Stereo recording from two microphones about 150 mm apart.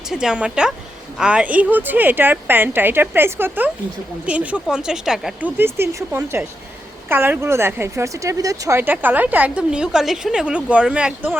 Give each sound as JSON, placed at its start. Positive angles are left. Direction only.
{"t": 0.1, "sound": "speech", "side_deg": -5}
{"t": 5.5, "sound": "speech", "side_deg": -15}